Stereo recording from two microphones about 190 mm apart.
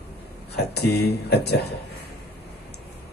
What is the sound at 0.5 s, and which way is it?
A man's voice, 60° left (ahead or behind).